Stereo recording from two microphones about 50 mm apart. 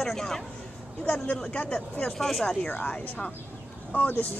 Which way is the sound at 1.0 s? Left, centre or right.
Left.